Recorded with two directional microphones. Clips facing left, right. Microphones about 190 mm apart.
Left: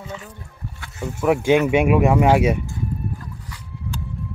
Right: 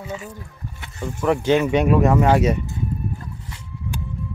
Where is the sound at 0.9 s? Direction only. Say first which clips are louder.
Left 1 dB; 10° left (ahead or behind).